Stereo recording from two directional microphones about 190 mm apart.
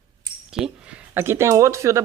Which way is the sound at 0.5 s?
5° right (ahead or behind).